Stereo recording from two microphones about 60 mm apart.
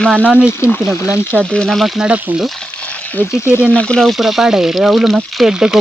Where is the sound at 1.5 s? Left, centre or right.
Centre.